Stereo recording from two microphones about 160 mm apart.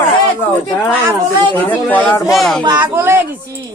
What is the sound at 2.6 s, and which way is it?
Speech, 25° right (ahead or behind).